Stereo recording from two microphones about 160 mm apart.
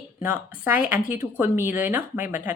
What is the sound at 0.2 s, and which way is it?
A woman's voice, 15° right (ahead or behind).